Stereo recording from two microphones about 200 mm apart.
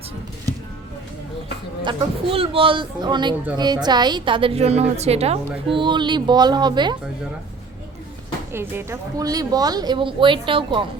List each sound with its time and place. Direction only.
1.8 s a woman's voice: 25° right (ahead or behind)
8.5 s a woman's voice: 10° right (ahead or behind)